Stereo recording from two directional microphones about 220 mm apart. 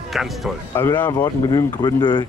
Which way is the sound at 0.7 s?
10° left (ahead or behind).